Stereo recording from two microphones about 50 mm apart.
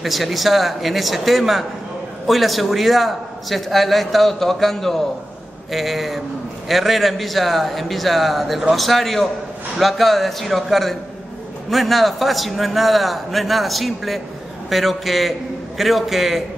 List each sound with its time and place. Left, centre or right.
0.0 s a man's voice: centre